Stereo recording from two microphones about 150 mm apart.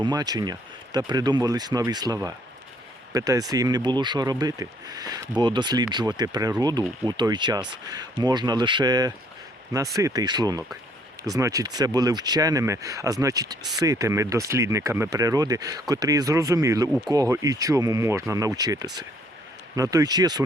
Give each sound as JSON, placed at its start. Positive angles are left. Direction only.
{"t": 0.0, "sound": "speech", "side_deg": -25}